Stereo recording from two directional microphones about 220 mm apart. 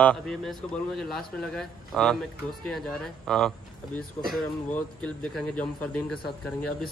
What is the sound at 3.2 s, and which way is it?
A man's voice, centre (ahead or behind).